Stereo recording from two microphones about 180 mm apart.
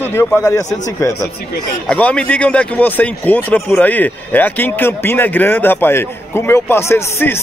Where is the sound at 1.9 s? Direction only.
5° left (ahead or behind).